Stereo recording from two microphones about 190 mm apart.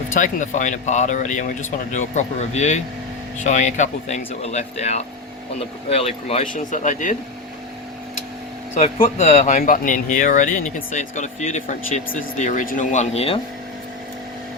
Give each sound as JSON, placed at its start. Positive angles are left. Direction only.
{"t": 0.1, "sound": "speech", "side_deg": 40}
{"t": 8.7, "sound": "speech", "side_deg": 35}